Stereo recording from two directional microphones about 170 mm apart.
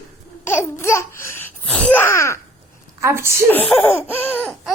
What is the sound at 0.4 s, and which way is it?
Babbling, 15° left (ahead or behind).